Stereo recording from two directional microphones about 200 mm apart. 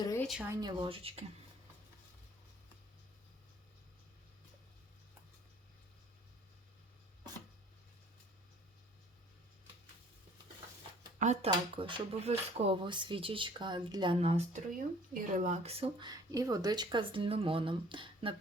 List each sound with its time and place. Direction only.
0.2 s a sound: centre (ahead or behind)
0.5 s speech: 20° right (ahead or behind)
11.2 s speech: 35° right (ahead or behind)